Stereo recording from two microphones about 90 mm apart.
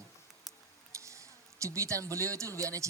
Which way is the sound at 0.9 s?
35° right (ahead or behind).